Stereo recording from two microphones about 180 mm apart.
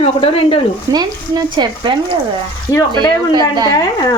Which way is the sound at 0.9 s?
15° right (ahead or behind).